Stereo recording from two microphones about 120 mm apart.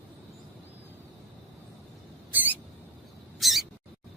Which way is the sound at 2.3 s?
15° right (ahead or behind).